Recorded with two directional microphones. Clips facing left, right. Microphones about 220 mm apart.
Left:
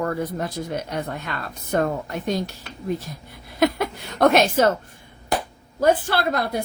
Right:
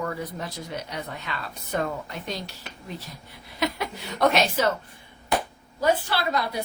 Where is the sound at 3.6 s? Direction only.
50° left (ahead or behind).